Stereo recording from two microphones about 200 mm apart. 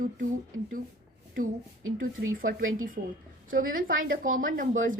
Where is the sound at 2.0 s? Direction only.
45° right (ahead or behind).